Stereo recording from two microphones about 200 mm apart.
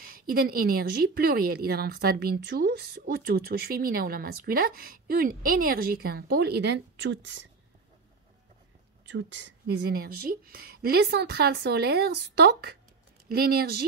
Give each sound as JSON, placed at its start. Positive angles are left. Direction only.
{"t": 0.0, "sound": "speech", "side_deg": -45}
{"t": 9.1, "sound": "speech", "side_deg": -60}